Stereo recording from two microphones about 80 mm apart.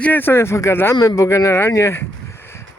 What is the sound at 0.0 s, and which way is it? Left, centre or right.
Speech, left.